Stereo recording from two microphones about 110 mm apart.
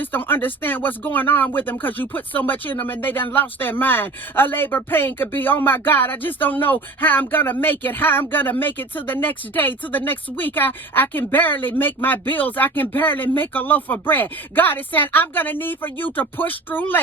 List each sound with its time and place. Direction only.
0.0 s speech: 20° left (ahead or behind)